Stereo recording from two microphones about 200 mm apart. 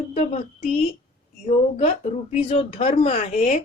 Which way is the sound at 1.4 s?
30° left (ahead or behind).